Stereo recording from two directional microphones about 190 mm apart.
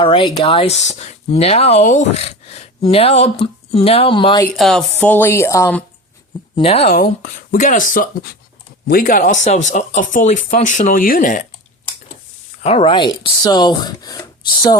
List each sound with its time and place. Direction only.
0.0 s speech: 30° left (ahead or behind)
4.5 s speech: centre (ahead or behind)
6.6 s speech: 30° left (ahead or behind)
7.0 s speech: 45° left (ahead or behind)
12.6 s speech: 30° left (ahead or behind)